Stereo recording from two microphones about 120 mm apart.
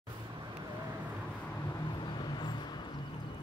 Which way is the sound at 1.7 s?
40° left (ahead or behind).